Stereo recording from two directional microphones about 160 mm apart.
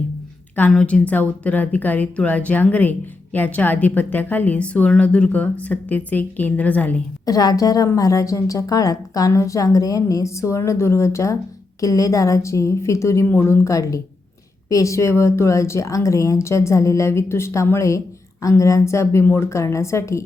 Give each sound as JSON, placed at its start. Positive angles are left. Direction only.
{"t": 0.5, "sound": "a woman's voice", "side_deg": 10}
{"t": 7.3, "sound": "a woman's voice", "side_deg": 25}